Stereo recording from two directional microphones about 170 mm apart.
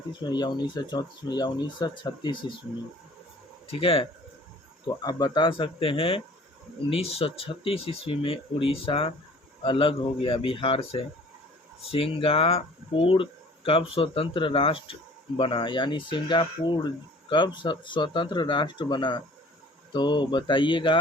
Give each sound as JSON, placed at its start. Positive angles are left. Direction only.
{"t": 0.1, "sound": "speech", "side_deg": 25}
{"t": 3.7, "sound": "speech", "side_deg": 35}